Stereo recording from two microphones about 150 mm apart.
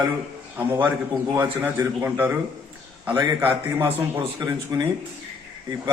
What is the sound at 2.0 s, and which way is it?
A man's voice, 15° right (ahead or behind).